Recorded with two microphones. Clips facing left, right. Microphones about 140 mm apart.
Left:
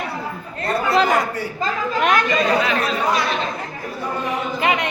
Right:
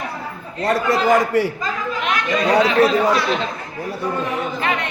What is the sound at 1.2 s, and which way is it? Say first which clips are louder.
Speech: right 7 dB; 90° right.